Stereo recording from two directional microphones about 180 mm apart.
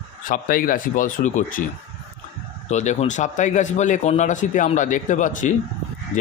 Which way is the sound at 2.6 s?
40° left (ahead or behind).